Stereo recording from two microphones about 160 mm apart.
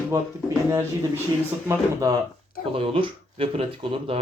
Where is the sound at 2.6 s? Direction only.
35° right (ahead or behind).